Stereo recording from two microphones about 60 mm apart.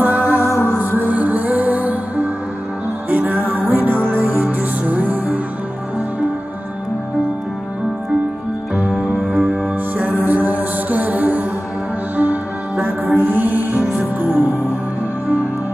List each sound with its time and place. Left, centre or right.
0.0 s music: right
8.7 s music: centre
9.9 s music: right